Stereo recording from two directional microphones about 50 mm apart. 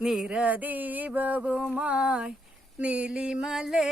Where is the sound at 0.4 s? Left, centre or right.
Right.